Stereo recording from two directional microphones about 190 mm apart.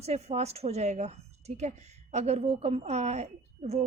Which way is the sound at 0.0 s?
35° right (ahead or behind).